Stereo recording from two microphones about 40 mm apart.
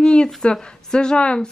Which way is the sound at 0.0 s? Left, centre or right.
Left.